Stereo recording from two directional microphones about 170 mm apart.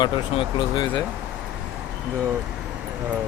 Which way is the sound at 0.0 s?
25° left (ahead or behind).